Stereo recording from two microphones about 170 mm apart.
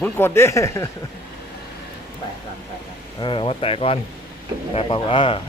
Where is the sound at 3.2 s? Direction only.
30° left (ahead or behind).